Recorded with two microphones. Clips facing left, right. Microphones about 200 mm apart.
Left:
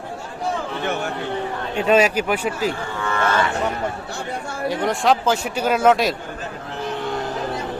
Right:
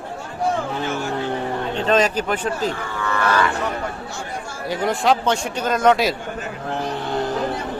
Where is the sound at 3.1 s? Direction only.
25° left (ahead or behind).